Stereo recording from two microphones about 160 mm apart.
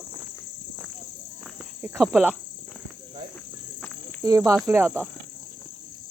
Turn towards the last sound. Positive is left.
turn(degrees=-15)  # may be behind; listen again after turning